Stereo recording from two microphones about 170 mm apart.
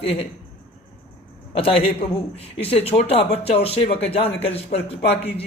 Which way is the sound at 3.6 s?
35° left (ahead or behind).